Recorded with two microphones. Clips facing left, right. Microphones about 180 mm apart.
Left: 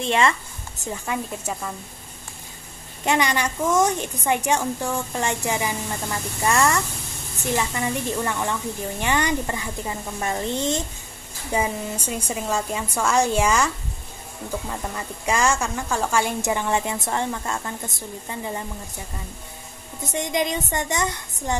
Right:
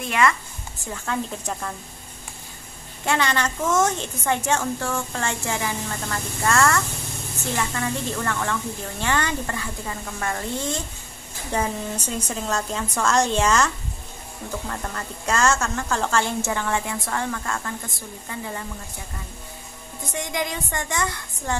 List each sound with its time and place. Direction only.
0.0 s a woman's voice: 25° left (ahead or behind)
0.9 s a woman's voice: 15° left (ahead or behind)
3.1 s a woman's voice: 15° left (ahead or behind)
11.5 s a woman's voice: 10° left (ahead or behind)
14.7 s a woman's voice: 10° left (ahead or behind)
20.0 s speech: 20° left (ahead or behind)